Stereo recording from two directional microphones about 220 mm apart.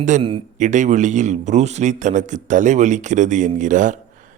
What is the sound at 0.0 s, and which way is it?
A man's voice, 30° right (ahead or behind).